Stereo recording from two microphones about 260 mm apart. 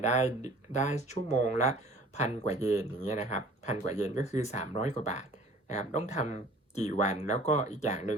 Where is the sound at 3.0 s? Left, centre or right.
Left.